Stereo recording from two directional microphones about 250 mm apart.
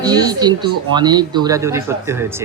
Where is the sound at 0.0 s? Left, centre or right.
Centre.